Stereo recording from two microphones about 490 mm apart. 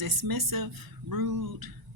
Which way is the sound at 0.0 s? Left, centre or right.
Right.